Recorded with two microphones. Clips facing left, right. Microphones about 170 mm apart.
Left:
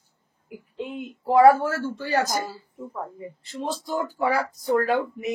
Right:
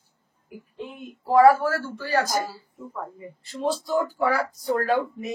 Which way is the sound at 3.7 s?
20° left (ahead or behind).